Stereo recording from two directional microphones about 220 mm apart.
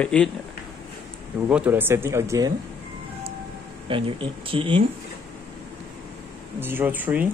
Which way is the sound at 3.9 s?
25° right (ahead or behind).